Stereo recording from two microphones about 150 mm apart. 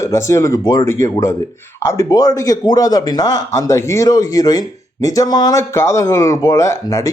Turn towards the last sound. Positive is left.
turn(degrees=25)  # may be behind; listen again after turning